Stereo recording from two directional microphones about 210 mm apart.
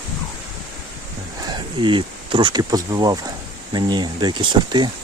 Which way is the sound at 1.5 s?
25° right (ahead or behind).